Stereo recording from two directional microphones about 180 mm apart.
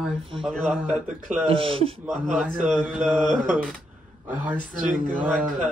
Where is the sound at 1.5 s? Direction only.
30° right (ahead or behind).